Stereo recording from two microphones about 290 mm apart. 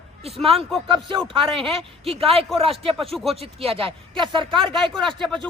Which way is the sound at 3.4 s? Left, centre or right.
Centre.